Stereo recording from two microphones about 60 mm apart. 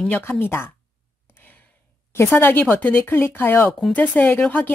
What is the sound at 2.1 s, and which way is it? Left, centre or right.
Speech, left.